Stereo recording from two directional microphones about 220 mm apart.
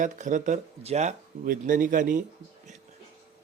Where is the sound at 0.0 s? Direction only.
35° right (ahead or behind).